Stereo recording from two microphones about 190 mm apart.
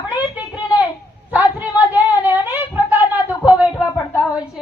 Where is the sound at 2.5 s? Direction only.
10° right (ahead or behind).